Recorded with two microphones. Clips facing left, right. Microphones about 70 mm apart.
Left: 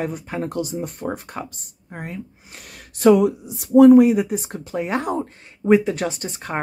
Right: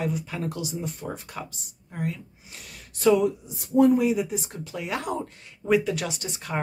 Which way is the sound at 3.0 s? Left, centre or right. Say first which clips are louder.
Left 6 dB; left.